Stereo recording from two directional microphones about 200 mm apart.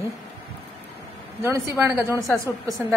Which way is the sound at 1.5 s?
10° right (ahead or behind).